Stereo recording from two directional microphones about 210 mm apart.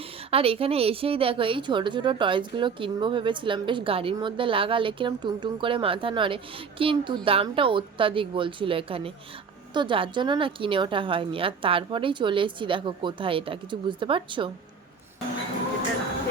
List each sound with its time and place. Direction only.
0.3 s a woman's voice: 25° right (ahead or behind)